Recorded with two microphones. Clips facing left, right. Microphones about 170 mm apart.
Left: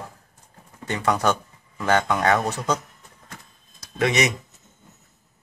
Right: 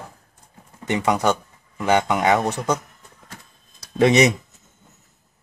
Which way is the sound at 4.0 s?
30° right (ahead or behind).